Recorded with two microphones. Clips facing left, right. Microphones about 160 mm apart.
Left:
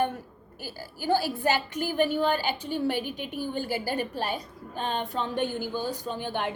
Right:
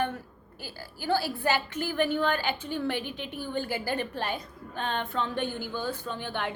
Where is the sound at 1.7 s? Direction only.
15° left (ahead or behind).